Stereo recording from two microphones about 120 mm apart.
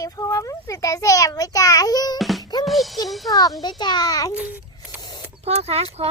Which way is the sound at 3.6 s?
35° left (ahead or behind).